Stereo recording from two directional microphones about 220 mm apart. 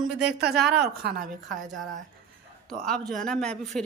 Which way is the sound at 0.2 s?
50° right (ahead or behind).